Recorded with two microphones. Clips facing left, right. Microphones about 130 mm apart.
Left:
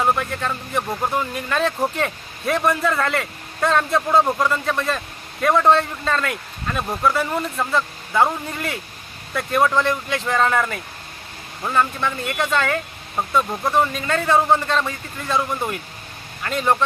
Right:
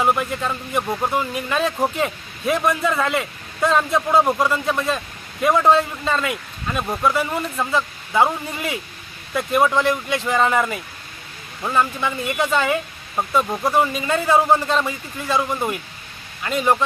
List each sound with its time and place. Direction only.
0.0 s speech: 10° right (ahead or behind)